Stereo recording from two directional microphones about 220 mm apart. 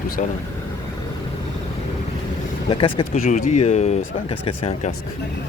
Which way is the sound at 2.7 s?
20° left (ahead or behind).